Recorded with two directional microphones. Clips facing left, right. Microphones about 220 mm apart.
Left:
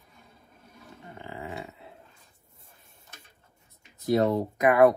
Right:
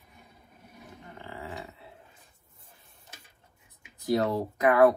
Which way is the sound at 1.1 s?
15° left (ahead or behind).